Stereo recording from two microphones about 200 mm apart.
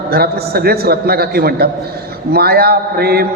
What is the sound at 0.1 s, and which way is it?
A man's voice, 50° right (ahead or behind).